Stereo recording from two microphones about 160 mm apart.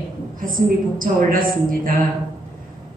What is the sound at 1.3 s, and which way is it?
Speech, 60° right (ahead or behind).